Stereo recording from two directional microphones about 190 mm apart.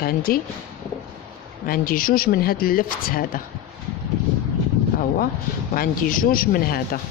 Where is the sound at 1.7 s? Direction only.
50° left (ahead or behind).